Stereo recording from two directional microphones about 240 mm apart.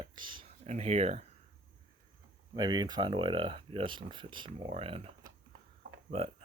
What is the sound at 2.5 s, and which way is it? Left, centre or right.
Speech, centre.